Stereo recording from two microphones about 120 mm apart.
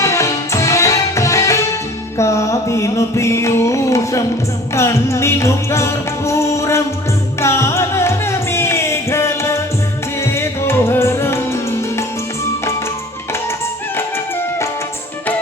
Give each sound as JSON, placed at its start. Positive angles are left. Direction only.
{"t": 0.0, "sound": "music", "side_deg": 25}